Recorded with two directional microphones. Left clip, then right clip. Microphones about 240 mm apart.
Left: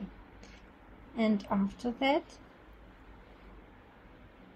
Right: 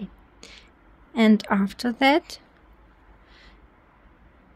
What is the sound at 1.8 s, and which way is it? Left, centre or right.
Speech, right.